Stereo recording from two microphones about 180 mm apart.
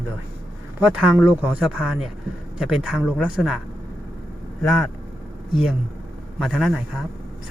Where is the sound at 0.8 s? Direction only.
10° right (ahead or behind).